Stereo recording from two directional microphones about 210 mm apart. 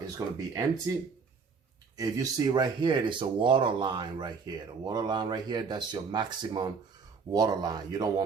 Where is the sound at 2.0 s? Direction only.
15° right (ahead or behind).